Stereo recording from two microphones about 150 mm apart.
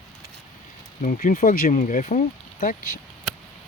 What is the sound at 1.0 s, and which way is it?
Speech, 65° left (ahead or behind).